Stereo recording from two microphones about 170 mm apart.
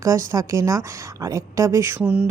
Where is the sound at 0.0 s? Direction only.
20° right (ahead or behind).